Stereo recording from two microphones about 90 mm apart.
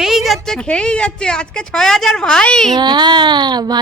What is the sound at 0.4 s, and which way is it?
A woman's voice, 5° left (ahead or behind).